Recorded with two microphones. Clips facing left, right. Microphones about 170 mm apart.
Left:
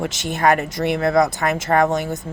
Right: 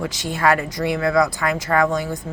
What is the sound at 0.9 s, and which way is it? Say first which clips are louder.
Speech: left 1 dB; 45° left (ahead or behind).